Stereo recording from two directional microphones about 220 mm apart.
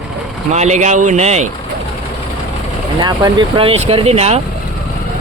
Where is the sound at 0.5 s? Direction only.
30° right (ahead or behind).